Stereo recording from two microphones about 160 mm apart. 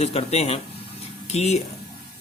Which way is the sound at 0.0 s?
40° left (ahead or behind).